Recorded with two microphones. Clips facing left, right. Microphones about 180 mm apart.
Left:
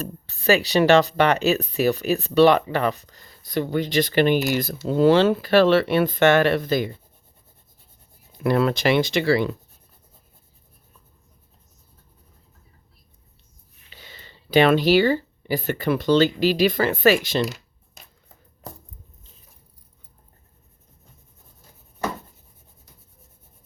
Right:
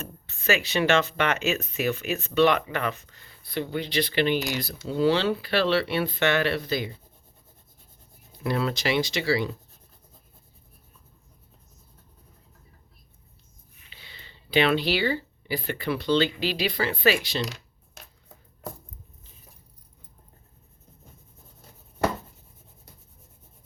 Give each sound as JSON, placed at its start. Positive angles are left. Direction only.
{"t": 0.0, "sound": "speech", "side_deg": 35}
{"t": 8.4, "sound": "speech", "side_deg": 55}
{"t": 13.9, "sound": "speech", "side_deg": 45}